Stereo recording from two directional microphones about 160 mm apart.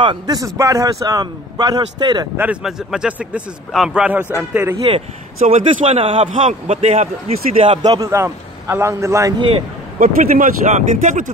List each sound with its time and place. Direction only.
0.0 s a man's voice: 25° right (ahead or behind)
2.3 s speech: 10° right (ahead or behind)
5.5 s a man's voice: 35° right (ahead or behind)
7.6 s a man's voice: 30° right (ahead or behind)
9.9 s speech: 55° right (ahead or behind)